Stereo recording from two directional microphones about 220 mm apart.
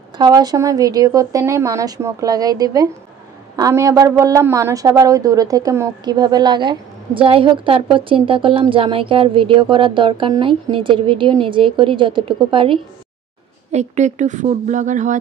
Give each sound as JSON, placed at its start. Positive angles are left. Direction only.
{"t": 0.2, "sound": "a woman's voice", "side_deg": -15}